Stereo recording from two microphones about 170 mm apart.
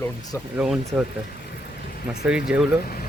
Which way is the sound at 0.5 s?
5° right (ahead or behind).